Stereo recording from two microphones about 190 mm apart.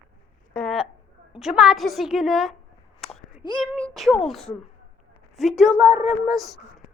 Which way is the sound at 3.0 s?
Centre (ahead or behind).